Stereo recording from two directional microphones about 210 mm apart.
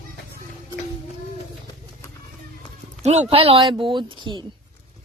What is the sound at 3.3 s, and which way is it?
Speech, 25° right (ahead or behind).